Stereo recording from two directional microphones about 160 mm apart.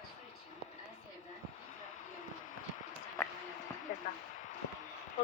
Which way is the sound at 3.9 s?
65° left (ahead or behind).